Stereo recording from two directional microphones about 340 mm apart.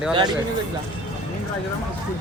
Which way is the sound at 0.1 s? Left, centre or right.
Centre.